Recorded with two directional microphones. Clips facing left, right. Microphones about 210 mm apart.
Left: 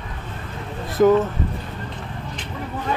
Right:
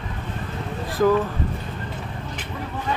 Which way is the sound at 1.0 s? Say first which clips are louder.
Left 4 dB; 20° left (ahead or behind).